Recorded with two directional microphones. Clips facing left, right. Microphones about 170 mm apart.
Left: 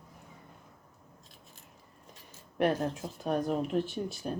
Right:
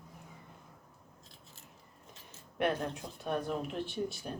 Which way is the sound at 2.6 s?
40° left (ahead or behind).